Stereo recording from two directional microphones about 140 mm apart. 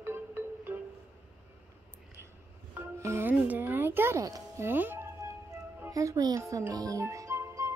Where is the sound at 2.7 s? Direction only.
20° right (ahead or behind).